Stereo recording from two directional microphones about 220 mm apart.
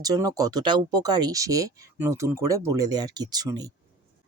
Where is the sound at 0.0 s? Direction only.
15° right (ahead or behind).